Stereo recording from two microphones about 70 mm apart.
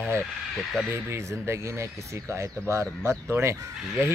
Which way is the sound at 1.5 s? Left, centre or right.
Right.